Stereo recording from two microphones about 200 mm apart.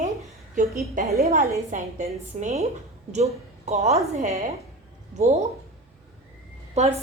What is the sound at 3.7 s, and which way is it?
Speech, 30° right (ahead or behind).